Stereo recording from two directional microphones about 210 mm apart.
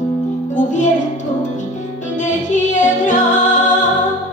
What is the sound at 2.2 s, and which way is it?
Music, 35° left (ahead or behind).